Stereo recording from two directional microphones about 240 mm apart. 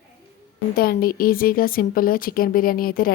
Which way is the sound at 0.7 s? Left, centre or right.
Left.